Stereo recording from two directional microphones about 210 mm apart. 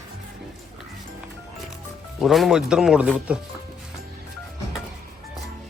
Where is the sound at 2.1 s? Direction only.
Centre (ahead or behind).